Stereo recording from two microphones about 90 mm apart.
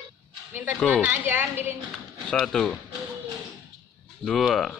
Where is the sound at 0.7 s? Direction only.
15° left (ahead or behind).